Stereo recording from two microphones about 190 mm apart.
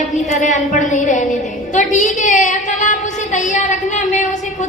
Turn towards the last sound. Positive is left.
turn(degrees=40)  # may be behind; listen again after turning